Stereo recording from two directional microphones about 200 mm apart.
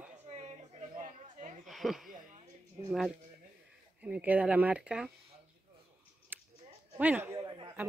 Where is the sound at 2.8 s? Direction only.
Centre (ahead or behind).